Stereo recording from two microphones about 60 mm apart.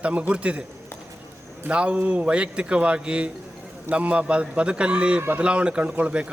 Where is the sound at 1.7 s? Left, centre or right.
Centre.